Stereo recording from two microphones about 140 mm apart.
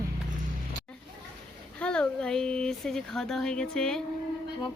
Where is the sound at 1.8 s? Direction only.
5° left (ahead or behind).